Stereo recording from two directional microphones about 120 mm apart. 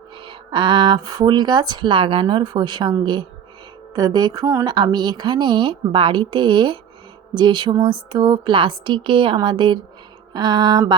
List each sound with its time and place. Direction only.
0.2 s speech: 40° right (ahead or behind)